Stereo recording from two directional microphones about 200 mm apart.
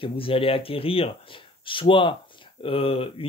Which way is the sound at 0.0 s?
25° left (ahead or behind).